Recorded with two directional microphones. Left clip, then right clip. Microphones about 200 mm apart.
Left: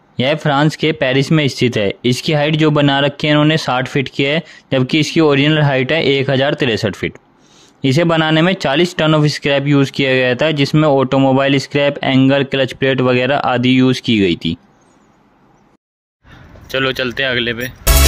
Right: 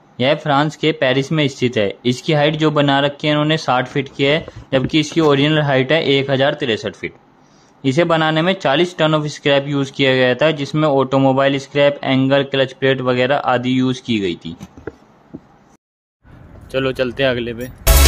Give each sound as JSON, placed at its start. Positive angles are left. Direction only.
{"t": 0.2, "sound": "speech", "side_deg": 40}
{"t": 16.6, "sound": "speech", "side_deg": 0}